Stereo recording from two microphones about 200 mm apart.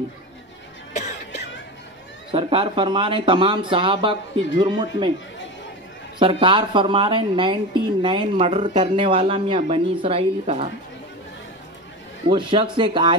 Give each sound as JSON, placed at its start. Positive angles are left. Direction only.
{"t": 2.3, "sound": "speech", "side_deg": -25}
{"t": 6.1, "sound": "speech", "side_deg": -25}
{"t": 12.3, "sound": "speech", "side_deg": -25}